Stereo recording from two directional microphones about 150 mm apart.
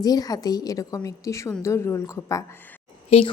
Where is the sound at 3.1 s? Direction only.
40° left (ahead or behind).